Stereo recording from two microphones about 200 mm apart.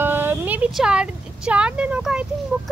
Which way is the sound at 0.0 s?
10° right (ahead or behind).